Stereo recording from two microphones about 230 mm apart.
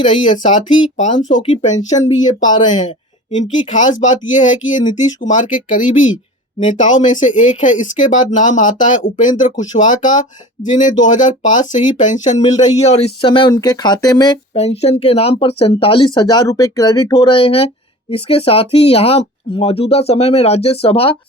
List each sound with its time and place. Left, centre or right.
0.0 s speech: left
2.4 s speech: centre
3.3 s speech: left